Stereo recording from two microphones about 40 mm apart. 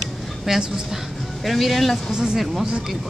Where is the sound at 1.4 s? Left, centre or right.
Centre.